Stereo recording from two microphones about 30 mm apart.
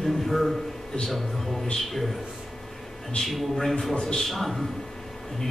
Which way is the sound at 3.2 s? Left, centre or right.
Centre.